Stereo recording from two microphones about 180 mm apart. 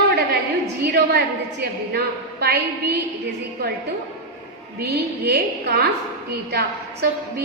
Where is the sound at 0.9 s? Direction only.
65° right (ahead or behind).